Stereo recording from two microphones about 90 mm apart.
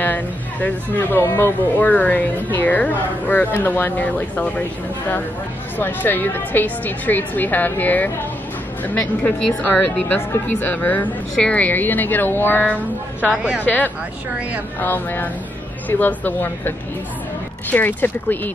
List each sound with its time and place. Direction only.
0.0 s a woman's voice: 20° left (ahead or behind)
5.8 s a woman's voice: 20° left (ahead or behind)
13.4 s a woman's voice: 15° right (ahead or behind)
13.7 s a woman's voice: 20° left (ahead or behind)